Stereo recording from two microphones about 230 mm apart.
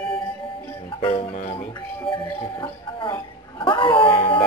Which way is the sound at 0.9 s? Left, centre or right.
Left.